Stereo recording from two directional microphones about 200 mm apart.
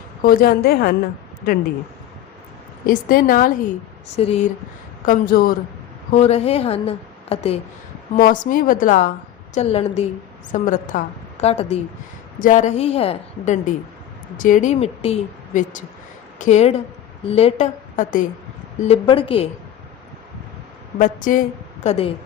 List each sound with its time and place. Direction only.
0.2 s a woman's voice: 45° left (ahead or behind)
2.8 s a woman's voice: 45° left (ahead or behind)
4.2 s a woman's voice: 30° left (ahead or behind)
5.0 s a woman's voice: 45° left (ahead or behind)
6.1 s a woman's voice: 30° left (ahead or behind)
8.1 s a woman's voice: 40° left (ahead or behind)
18.9 s a woman's voice: 25° left (ahead or behind)
21.0 s a woman's voice: 40° left (ahead or behind)
21.8 s a woman's voice: 30° left (ahead or behind)